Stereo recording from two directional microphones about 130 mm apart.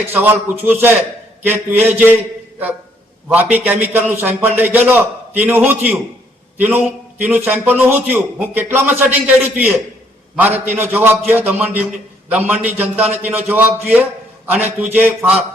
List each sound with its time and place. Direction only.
0.0 s a man's voice: 15° right (ahead or behind)
3.2 s a man's voice: 15° right (ahead or behind)